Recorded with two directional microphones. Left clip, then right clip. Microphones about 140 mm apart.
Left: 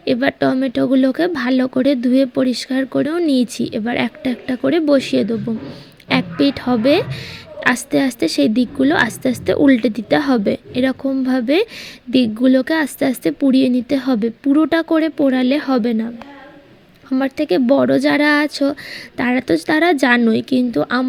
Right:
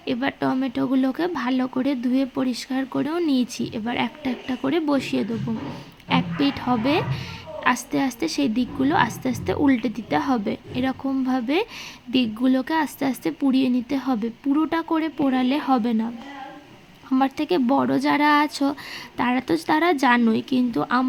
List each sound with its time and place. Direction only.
0.0 s a woman's voice: 35° left (ahead or behind)